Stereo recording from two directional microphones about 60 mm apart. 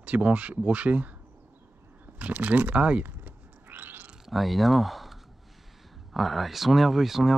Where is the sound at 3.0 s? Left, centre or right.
Right.